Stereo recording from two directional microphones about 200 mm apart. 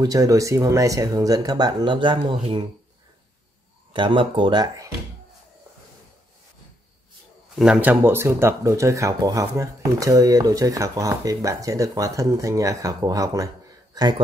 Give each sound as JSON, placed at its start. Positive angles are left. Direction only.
{"t": 0.0, "sound": "speech", "side_deg": -15}
{"t": 3.9, "sound": "speech", "side_deg": -25}
{"t": 7.5, "sound": "speech", "side_deg": -5}